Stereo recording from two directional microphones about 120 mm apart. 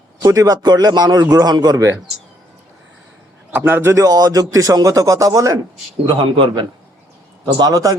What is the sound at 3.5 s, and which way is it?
A man's voice, 15° right (ahead or behind).